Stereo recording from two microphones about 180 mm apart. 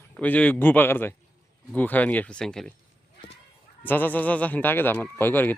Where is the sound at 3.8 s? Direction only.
10° left (ahead or behind).